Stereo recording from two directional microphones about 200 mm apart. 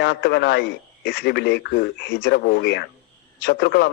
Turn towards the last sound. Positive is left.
turn(degrees=55)  # may be behind; listen again after turning